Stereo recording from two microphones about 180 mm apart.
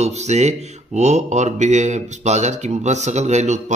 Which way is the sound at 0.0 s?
40° right (ahead or behind).